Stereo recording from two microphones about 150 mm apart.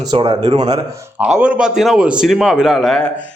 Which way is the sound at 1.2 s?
5° right (ahead or behind).